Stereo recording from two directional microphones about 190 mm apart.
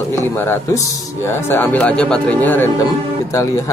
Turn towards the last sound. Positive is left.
turn(degrees=15)  # may be behind; listen again after turning